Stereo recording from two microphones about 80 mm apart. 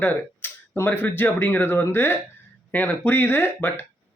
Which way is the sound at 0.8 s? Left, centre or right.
Left.